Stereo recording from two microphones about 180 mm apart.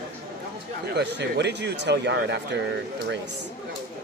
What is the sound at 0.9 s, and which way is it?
Speech, 70° right (ahead or behind).